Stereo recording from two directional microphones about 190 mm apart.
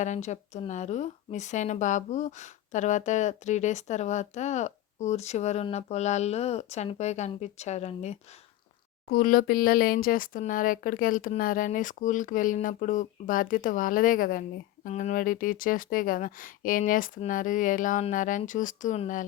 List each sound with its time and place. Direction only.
0.0 s a woman's voice: 40° left (ahead or behind)
9.0 s speech: 50° left (ahead or behind)